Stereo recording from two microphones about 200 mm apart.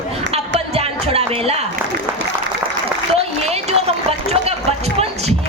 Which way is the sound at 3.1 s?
30° right (ahead or behind).